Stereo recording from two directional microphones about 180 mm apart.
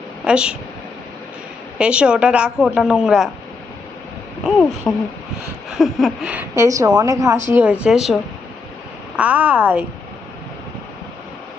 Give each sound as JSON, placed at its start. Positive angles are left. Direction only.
{"t": 0.3, "sound": "a woman's voice", "side_deg": -5}
{"t": 1.8, "sound": "a woman's voice", "side_deg": -5}
{"t": 4.4, "sound": "a woman's voice", "side_deg": 0}
{"t": 6.6, "sound": "a woman's voice", "side_deg": -20}